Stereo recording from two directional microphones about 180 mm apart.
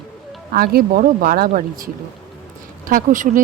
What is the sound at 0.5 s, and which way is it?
Speech, 55° right (ahead or behind).